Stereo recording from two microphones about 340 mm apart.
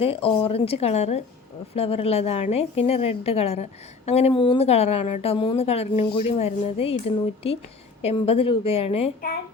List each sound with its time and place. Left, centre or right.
0.0 s a woman's voice: centre
8.0 s a woman's voice: centre